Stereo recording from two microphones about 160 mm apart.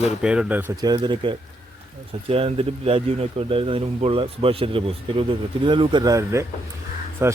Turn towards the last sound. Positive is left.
turn(degrees=-15)  # may be behind; listen again after turning